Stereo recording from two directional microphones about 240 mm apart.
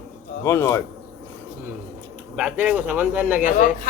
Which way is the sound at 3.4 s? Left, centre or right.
Left.